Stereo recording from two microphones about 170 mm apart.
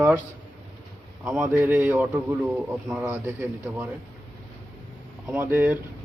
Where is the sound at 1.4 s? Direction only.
10° right (ahead or behind).